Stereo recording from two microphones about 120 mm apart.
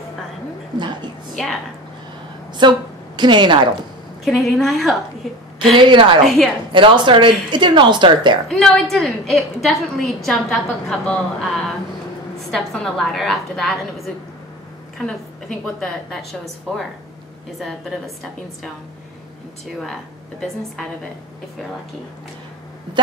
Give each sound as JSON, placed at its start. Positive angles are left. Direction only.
{"t": 1.3, "sound": "a woman's voice", "side_deg": 5}
{"t": 2.6, "sound": "speech", "side_deg": -40}
{"t": 4.2, "sound": "a woman's voice", "side_deg": 0}
{"t": 5.7, "sound": "a woman's voice", "side_deg": -45}
{"t": 6.2, "sound": "a woman's voice", "side_deg": 0}
{"t": 6.7, "sound": "speech", "side_deg": -45}
{"t": 8.5, "sound": "a woman's voice", "side_deg": 5}
{"t": 19.8, "sound": "a woman's voice", "side_deg": 5}